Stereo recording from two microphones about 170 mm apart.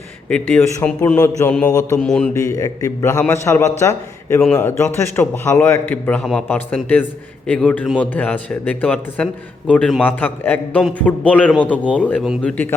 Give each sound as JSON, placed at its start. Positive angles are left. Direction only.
{"t": 0.3, "sound": "a man's voice", "side_deg": 5}
{"t": 2.3, "sound": "a man's voice", "side_deg": 20}